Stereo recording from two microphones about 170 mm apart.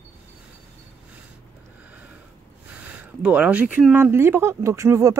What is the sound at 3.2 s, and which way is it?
Speech, 5° right (ahead or behind).